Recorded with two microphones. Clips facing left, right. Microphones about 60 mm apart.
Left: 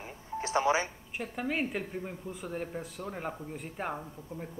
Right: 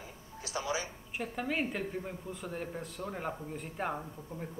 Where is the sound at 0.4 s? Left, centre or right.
Left.